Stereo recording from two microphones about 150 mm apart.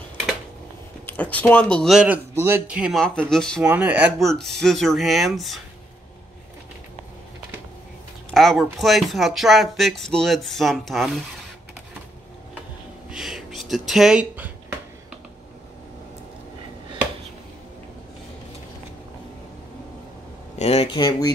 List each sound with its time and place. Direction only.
1.0 s speech: 10° left (ahead or behind)
2.3 s a man's voice: 15° right (ahead or behind)
3.0 s speech: 5° left (ahead or behind)
3.6 s speech: 10° right (ahead or behind)
4.4 s speech: centre (ahead or behind)
8.3 s a sound: centre (ahead or behind)
8.7 s speech: centre (ahead or behind)
13.1 s a sound: 5° right (ahead or behind)
20.5 s speech: 40° left (ahead or behind)